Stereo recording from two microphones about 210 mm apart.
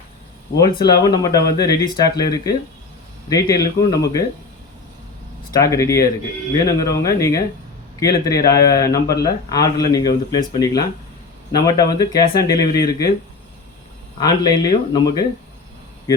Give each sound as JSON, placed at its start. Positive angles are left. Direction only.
{"t": 0.9, "sound": "speech", "side_deg": 20}
{"t": 5.5, "sound": "speech", "side_deg": 15}
{"t": 14.2, "sound": "speech", "side_deg": 20}